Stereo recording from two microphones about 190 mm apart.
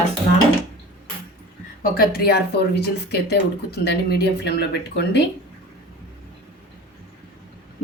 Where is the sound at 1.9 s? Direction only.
50° left (ahead or behind).